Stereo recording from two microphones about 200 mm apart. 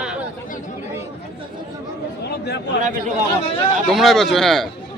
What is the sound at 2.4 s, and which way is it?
Speech, 55° left (ahead or behind).